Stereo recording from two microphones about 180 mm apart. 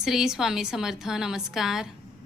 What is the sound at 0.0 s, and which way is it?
A woman's voice, 5° right (ahead or behind).